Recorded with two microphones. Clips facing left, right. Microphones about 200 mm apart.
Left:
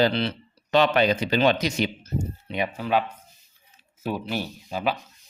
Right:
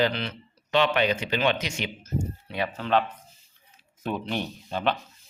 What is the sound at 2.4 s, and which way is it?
Speech, 20° left (ahead or behind).